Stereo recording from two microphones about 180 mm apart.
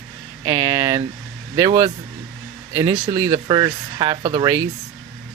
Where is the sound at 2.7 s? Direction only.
20° right (ahead or behind).